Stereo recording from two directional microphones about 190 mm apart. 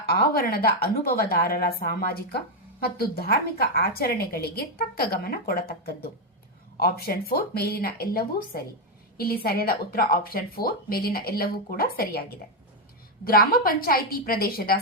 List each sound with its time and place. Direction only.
0.0 s a woman's voice: 55° left (ahead or behind)
13.2 s a woman's voice: 50° left (ahead or behind)